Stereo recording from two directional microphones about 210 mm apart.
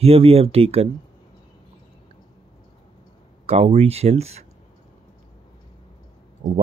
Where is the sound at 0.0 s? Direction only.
25° right (ahead or behind).